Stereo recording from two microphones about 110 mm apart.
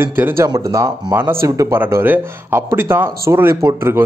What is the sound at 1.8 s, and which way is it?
Speech, 20° right (ahead or behind).